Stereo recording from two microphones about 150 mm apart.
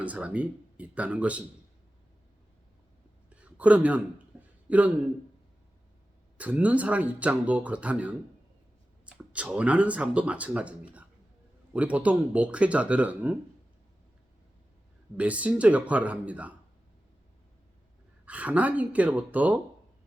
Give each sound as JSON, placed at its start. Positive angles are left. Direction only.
{"t": 0.0, "sound": "speech", "side_deg": -10}
{"t": 3.2, "sound": "a sound", "side_deg": -10}
{"t": 6.3, "sound": "speech", "side_deg": -10}
{"t": 15.2, "sound": "speech", "side_deg": -10}
{"t": 18.3, "sound": "speech", "side_deg": -10}